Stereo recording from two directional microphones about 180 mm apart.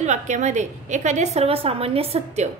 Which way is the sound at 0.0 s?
40° right (ahead or behind).